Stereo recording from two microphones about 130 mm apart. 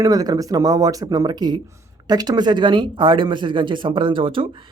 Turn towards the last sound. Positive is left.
turn(degrees=-40)  # may be behind; listen again after turning